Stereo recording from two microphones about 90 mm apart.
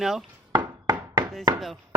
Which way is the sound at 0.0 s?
Centre (ahead or behind).